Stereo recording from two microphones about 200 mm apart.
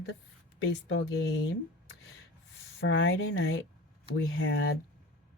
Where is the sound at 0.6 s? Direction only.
65° left (ahead or behind).